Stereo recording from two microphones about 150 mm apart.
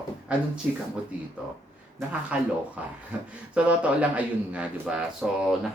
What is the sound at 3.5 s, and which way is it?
Speech, 10° right (ahead or behind).